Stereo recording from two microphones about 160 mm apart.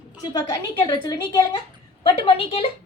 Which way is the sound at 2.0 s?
35° left (ahead or behind).